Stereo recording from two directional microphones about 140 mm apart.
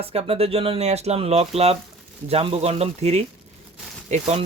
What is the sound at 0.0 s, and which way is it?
Speech, 45° right (ahead or behind).